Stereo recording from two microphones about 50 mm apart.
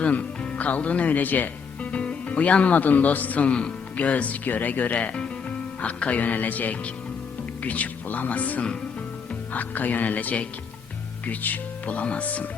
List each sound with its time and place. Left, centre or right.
0.0 s speech: left
3.4 s speech: left